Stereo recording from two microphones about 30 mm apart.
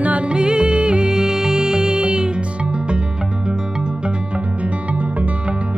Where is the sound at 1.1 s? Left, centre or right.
Centre.